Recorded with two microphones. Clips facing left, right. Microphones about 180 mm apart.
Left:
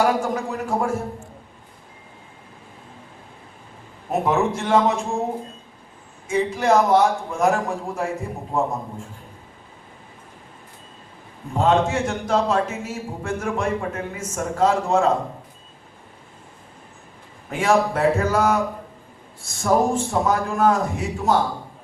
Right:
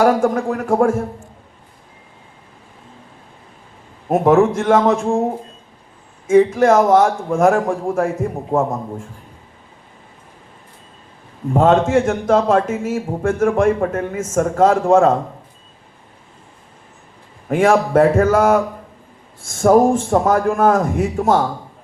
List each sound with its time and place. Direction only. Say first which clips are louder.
0.0 s a man's voice: right 6 dB; 50° right (ahead or behind)
4.1 s a man's voice: right 8 dB; 50° right (ahead or behind)
6.2 s a man's voice: right 9 dB; 50° right (ahead or behind)
11.5 s a man's voice: right 6 dB; 50° right (ahead or behind)
17.5 s a man's voice: right 6 dB; 50° right (ahead or behind)